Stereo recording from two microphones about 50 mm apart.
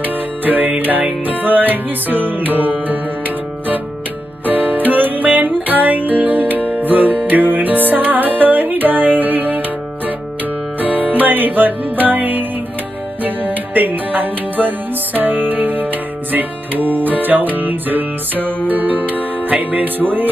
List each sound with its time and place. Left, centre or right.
0.0 s music: right